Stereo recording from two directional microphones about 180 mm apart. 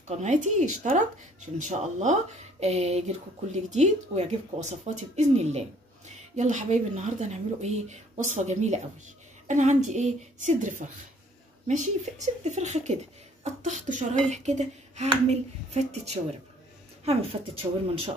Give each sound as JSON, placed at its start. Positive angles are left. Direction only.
{"t": 0.1, "sound": "a woman's voice", "side_deg": -40}